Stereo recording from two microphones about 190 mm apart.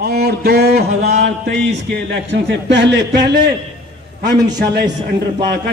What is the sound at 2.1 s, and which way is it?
A man's voice, 70° right (ahead or behind).